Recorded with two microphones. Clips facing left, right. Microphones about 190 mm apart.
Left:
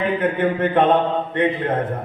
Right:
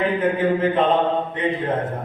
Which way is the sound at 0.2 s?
60° left (ahead or behind).